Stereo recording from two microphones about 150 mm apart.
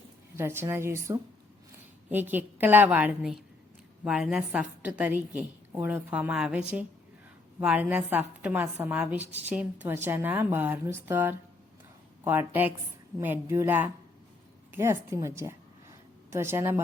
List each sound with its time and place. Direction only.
0.3 s a woman's voice: 15° right (ahead or behind)